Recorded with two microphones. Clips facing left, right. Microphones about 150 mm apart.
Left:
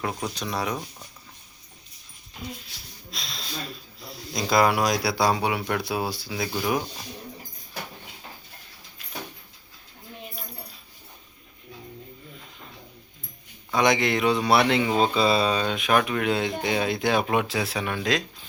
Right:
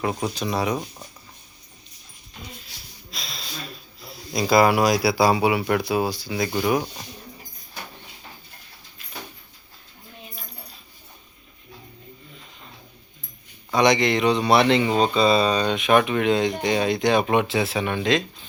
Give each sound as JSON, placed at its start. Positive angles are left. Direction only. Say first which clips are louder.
{"t": 0.0, "sound": "speech", "louder": "right 4 dB", "side_deg": -5}
{"t": 3.1, "sound": "a sound", "louder": "right 1 dB", "side_deg": 0}
{"t": 4.0, "sound": "speech", "louder": "right 4 dB", "side_deg": 0}
{"t": 13.7, "sound": "speech", "louder": "right 3 dB", "side_deg": 0}